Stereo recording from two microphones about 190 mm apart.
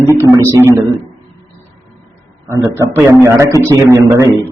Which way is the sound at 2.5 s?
15° right (ahead or behind).